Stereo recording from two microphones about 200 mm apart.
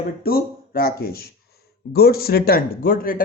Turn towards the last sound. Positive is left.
turn(degrees=45)  # may be behind; listen again after turning